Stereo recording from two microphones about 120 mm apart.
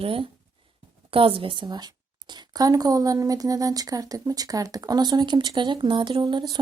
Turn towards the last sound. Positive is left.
turn(degrees=-45)  # may be behind; listen again after turning